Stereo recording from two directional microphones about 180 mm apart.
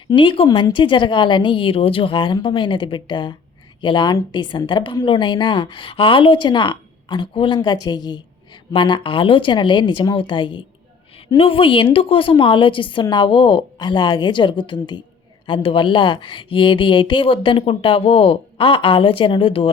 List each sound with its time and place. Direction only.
0.1 s speech: 25° left (ahead or behind)